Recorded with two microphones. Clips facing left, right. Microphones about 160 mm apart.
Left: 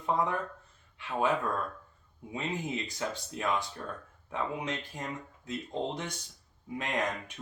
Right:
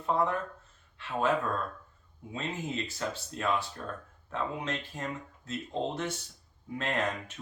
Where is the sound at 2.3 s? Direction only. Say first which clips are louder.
Left 1 dB; 15° left (ahead or behind).